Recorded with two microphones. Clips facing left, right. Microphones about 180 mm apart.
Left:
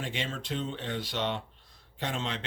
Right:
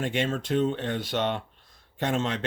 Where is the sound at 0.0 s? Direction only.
50° right (ahead or behind).